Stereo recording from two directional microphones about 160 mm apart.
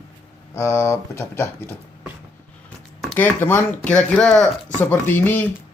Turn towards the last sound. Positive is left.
turn(degrees=10)  # may be behind; listen again after turning